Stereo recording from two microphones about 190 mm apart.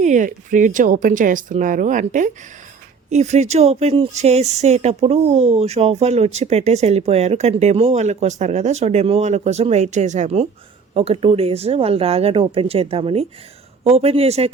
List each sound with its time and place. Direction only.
0.0 s speech: 40° right (ahead or behind)